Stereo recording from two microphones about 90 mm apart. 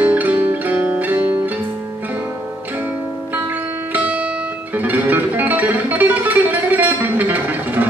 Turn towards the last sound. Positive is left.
turn(degrees=-20)  # may be behind; listen again after turning